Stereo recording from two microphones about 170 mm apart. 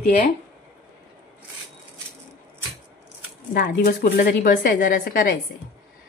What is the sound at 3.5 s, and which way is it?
A woman's voice, 60° left (ahead or behind).